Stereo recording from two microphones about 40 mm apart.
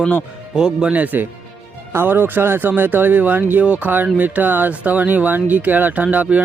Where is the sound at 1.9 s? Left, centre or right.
Right.